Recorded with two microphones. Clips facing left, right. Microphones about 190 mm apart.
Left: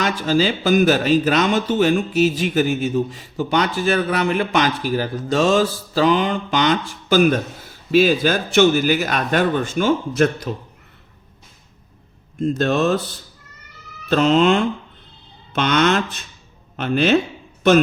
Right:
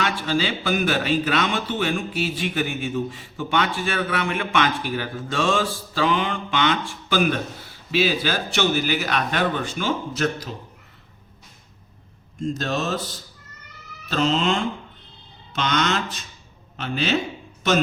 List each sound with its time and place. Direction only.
0.0 s a man's voice: 40° left (ahead or behind)
12.4 s speech: 60° left (ahead or behind)